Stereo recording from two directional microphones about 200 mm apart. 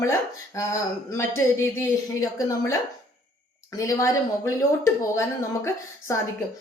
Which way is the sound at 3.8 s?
15° left (ahead or behind).